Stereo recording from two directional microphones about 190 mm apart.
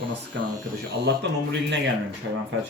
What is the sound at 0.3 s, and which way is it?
Speech, 75° right (ahead or behind).